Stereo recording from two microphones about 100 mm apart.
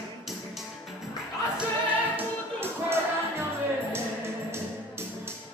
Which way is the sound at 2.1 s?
25° right (ahead or behind).